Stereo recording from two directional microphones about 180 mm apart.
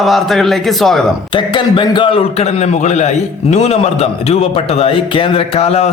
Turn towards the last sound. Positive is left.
turn(degrees=35)  # may be behind; listen again after turning